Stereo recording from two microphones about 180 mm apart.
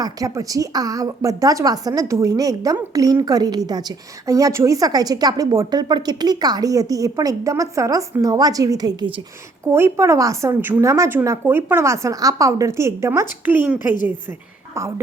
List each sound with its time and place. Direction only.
0.0 s a woman's voice: 20° right (ahead or behind)
9.6 s a woman's voice: 15° right (ahead or behind)
13.9 s a woman's voice: 45° left (ahead or behind)
14.8 s a woman's voice: 15° right (ahead or behind)